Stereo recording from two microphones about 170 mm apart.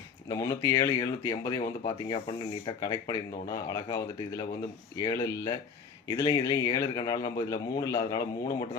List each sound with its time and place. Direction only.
0.3 s speech: 20° left (ahead or behind)
1.8 s speech: 30° left (ahead or behind)